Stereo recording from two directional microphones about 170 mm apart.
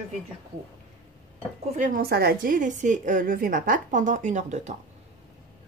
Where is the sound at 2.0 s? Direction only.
70° right (ahead or behind); by 4.7 s 45° right (ahead or behind).